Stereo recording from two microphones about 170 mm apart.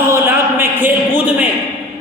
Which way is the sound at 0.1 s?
15° right (ahead or behind).